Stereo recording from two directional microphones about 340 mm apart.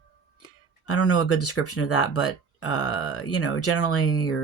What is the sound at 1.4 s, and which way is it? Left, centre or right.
Speech, left.